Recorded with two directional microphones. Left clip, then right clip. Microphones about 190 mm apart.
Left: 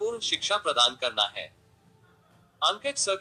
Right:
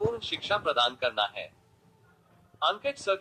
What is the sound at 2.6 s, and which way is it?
Speech, 20° left (ahead or behind).